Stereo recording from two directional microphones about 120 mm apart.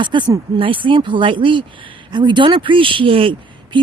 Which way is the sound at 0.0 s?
40° right (ahead or behind).